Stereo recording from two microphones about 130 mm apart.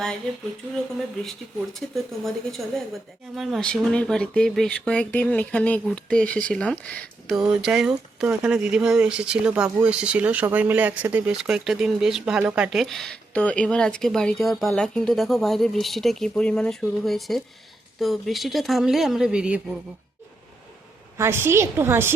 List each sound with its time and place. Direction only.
1.2 s a woman's voice: 5° left (ahead or behind)
7.3 s speech: 5° right (ahead or behind)
21.2 s a woman's voice: 20° right (ahead or behind)